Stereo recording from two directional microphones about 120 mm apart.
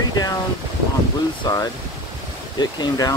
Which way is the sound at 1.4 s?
30° left (ahead or behind).